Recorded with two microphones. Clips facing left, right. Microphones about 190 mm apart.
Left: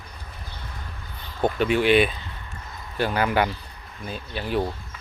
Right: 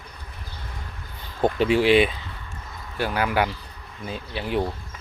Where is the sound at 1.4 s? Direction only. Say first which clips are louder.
Right 2 dB; 30° right (ahead or behind).